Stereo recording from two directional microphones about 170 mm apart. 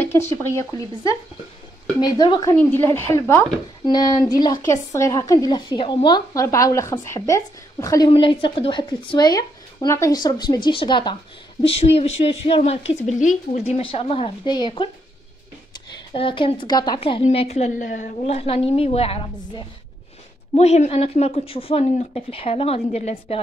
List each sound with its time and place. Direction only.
0.0 s speech: 15° left (ahead or behind)
2.5 s speech: 10° left (ahead or behind)
8.1 s a woman's voice: 30° left (ahead or behind)
13.0 s a woman's voice: 45° left (ahead or behind); by 14.9 s 25° left (ahead or behind)
16.1 s a woman's voice: 30° left (ahead or behind)